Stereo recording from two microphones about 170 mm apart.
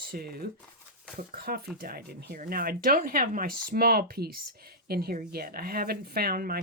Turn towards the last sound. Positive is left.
turn(degrees=-60)  # may be behind; listen again after turning